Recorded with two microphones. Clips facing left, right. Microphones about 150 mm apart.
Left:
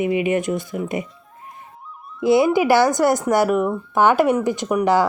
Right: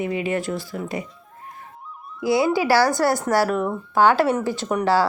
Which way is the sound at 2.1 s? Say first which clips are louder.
Left 4 dB; 20° left (ahead or behind).